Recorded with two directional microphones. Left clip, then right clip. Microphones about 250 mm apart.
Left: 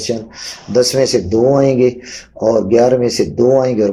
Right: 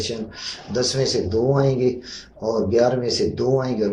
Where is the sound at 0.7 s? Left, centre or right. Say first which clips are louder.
Left 9 dB; left.